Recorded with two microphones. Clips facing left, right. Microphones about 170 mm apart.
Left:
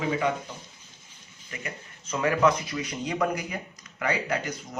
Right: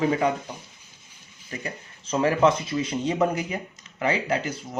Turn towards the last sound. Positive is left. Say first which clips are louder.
# right 3 dB
turn(degrees=-25)  # may be behind; listen again after turning